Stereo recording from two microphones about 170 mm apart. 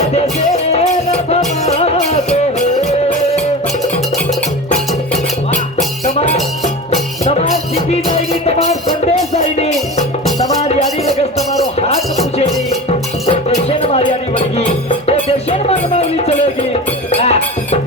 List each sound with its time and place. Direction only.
0.0 s music: 40° left (ahead or behind)
8.1 s music: 40° left (ahead or behind)
13.2 s music: 35° left (ahead or behind)